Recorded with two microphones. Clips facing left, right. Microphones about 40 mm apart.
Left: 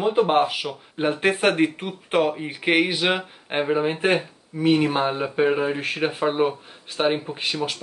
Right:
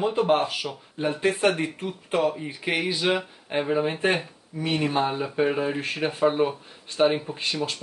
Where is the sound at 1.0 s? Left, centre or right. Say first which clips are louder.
Left 2 dB; left.